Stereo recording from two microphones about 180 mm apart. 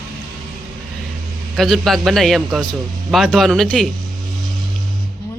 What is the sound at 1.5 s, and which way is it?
Speech, centre (ahead or behind).